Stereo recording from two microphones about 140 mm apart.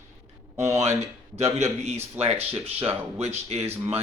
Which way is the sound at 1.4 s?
50° right (ahead or behind).